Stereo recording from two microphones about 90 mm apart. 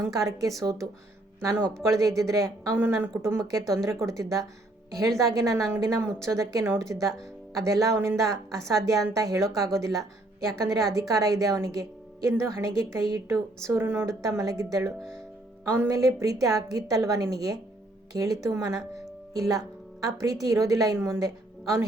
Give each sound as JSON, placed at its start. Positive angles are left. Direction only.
{"t": 0.0, "sound": "speech", "side_deg": -40}
{"t": 2.7, "sound": "speech", "side_deg": -25}
{"t": 13.7, "sound": "speech", "side_deg": -30}